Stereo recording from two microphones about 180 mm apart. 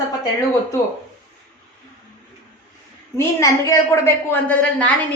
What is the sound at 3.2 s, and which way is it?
Speech, 15° left (ahead or behind).